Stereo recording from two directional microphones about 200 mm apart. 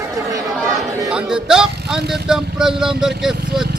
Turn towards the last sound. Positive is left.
turn(degrees=-5)  # may be behind; listen again after turning